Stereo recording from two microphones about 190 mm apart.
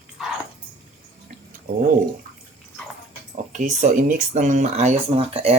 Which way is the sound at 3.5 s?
40° right (ahead or behind).